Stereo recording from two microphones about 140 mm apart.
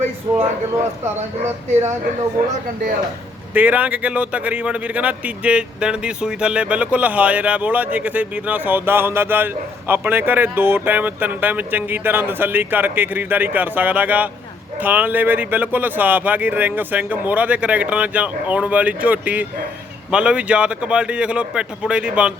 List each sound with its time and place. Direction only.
0.3 s speech: 25° right (ahead or behind)
3.5 s speech: 10° right (ahead or behind)